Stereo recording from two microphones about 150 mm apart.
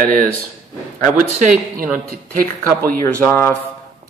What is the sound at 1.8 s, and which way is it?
Speech, 70° right (ahead or behind).